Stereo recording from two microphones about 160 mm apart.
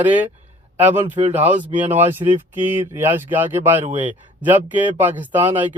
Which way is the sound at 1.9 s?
10° right (ahead or behind).